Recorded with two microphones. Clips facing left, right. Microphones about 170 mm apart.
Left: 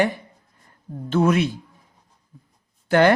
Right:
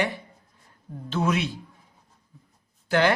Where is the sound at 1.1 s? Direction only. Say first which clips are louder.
Left 6 dB; 50° left (ahead or behind).